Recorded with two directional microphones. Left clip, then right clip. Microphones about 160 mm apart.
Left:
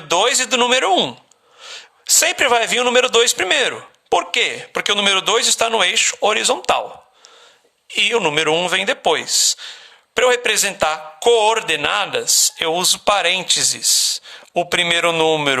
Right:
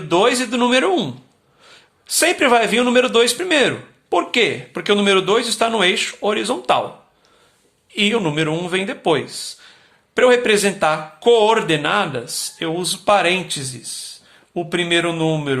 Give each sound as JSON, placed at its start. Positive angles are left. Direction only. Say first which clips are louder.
{"t": 0.1, "sound": "a man's voice", "louder": "even", "side_deg": 40}
{"t": 7.9, "sound": "a man's voice", "louder": "left 2 dB", "side_deg": 40}